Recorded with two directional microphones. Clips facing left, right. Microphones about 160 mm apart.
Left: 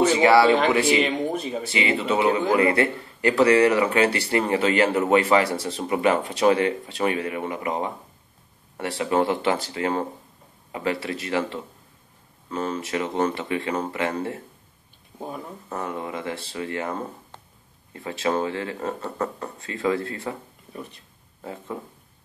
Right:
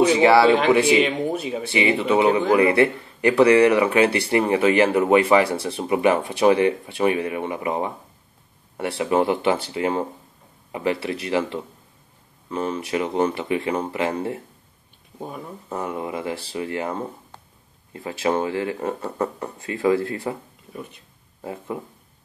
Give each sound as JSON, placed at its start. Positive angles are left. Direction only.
{"t": 0.2, "sound": "speech", "side_deg": -25}
{"t": 0.8, "sound": "speech", "side_deg": -5}
{"t": 1.7, "sound": "speech", "side_deg": -25}
{"t": 14.0, "sound": "speech", "side_deg": -25}
{"t": 15.7, "sound": "speech", "side_deg": -20}
{"t": 18.2, "sound": "speech", "side_deg": -20}
{"t": 21.4, "sound": "speech", "side_deg": -15}